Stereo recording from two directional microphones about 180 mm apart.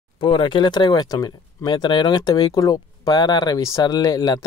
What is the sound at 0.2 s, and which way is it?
Speech, 30° left (ahead or behind).